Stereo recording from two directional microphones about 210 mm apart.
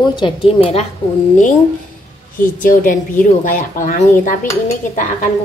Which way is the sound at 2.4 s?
40° left (ahead or behind).